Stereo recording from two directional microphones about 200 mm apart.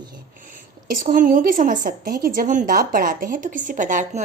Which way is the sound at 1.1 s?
40° right (ahead or behind).